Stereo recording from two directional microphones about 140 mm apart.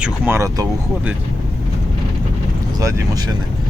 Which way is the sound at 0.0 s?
15° right (ahead or behind).